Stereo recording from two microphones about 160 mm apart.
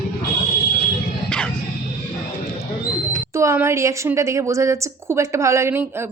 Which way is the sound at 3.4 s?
15° right (ahead or behind).